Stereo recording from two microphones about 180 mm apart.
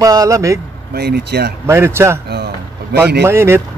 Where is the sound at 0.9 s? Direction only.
60° right (ahead or behind).